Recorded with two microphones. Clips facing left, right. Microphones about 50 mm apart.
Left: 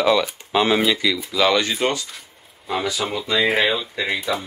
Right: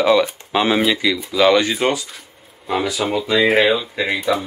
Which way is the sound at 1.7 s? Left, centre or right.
Centre.